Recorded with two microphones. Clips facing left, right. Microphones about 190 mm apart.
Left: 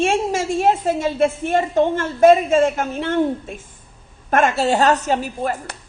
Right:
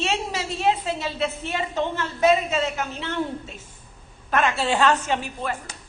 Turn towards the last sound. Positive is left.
turn(degrees=40)  # may be behind; listen again after turning